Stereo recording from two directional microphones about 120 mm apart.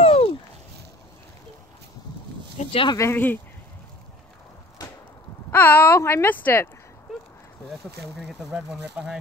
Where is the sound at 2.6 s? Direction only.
50° left (ahead or behind).